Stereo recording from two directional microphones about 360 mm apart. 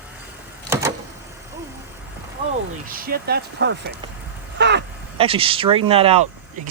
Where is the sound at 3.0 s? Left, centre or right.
Right.